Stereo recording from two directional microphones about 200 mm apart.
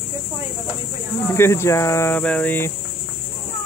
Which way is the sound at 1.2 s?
10° left (ahead or behind).